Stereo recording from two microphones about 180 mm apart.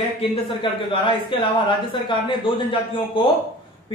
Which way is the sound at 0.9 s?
25° left (ahead or behind).